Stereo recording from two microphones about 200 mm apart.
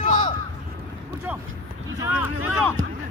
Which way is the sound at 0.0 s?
40° left (ahead or behind).